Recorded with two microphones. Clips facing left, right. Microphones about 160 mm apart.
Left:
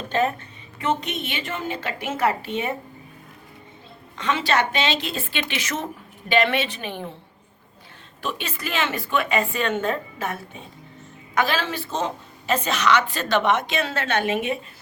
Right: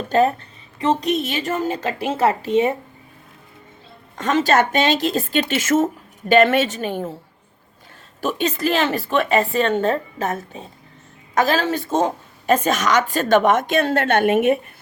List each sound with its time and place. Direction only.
0.1 s a woman's voice: 35° right (ahead or behind)
4.2 s a woman's voice: 45° right (ahead or behind)
8.2 s a woman's voice: 40° right (ahead or behind)